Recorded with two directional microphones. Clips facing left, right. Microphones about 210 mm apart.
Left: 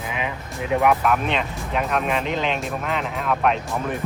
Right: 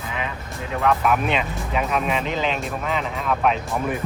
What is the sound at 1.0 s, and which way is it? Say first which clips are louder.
Speech: right 1 dB; 5° right (ahead or behind).